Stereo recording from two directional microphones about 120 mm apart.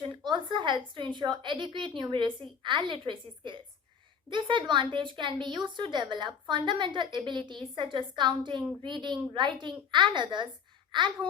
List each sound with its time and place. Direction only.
0.0 s a woman's voice: 40° right (ahead or behind)